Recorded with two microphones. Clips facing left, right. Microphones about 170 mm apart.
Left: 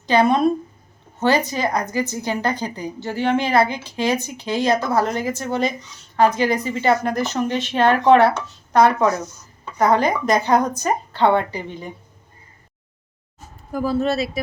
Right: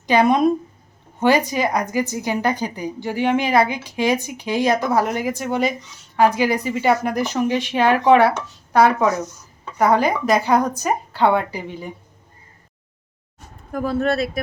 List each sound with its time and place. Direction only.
0.0 s a woman's voice: 15° right (ahead or behind)
13.7 s speech: centre (ahead or behind)
14.0 s speech: 55° right (ahead or behind)